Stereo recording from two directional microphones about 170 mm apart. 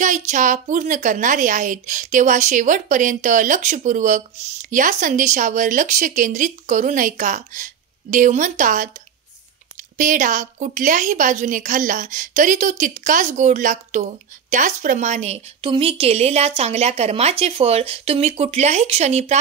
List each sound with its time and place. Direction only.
0.0 s a woman's voice: 45° right (ahead or behind)
9.9 s a woman's voice: 50° right (ahead or behind)
15.6 s a woman's voice: 35° right (ahead or behind)